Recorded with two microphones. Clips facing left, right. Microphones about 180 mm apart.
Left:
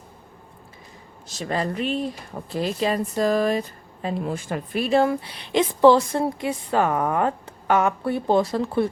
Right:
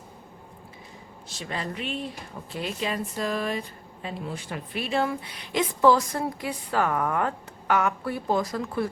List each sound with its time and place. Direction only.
1.3 s speech: 40° left (ahead or behind)